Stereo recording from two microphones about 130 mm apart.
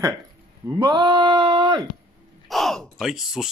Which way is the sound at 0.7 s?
35° right (ahead or behind).